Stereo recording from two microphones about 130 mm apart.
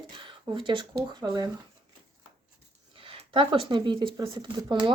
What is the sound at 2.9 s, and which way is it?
Speech, 45° right (ahead or behind).